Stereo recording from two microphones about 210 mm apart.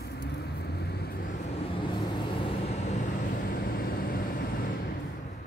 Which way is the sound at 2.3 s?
25° left (ahead or behind).